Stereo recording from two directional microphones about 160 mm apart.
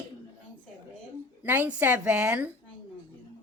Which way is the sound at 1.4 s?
10° right (ahead or behind).